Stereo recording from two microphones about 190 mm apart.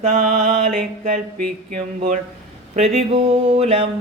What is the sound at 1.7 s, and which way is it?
Mantra, 40° right (ahead or behind).